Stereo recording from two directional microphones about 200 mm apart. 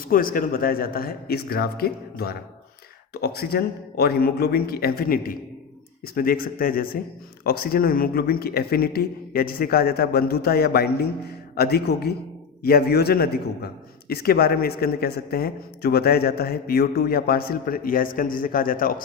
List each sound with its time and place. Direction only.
0.0 s a man's voice: 45° left (ahead or behind)